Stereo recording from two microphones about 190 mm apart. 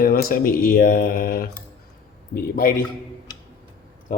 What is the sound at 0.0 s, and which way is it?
Speech, 50° left (ahead or behind).